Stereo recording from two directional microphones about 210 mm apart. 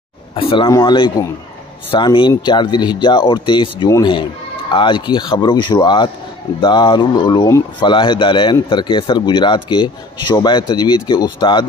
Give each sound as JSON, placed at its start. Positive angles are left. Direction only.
{"t": 0.4, "sound": "speech", "side_deg": 25}